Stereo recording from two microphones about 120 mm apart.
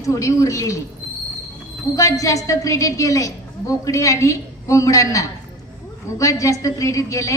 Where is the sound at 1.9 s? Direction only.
25° left (ahead or behind).